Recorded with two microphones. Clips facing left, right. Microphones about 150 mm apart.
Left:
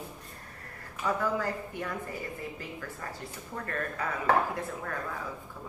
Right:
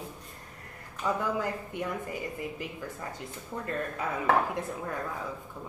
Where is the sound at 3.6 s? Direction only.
20° right (ahead or behind).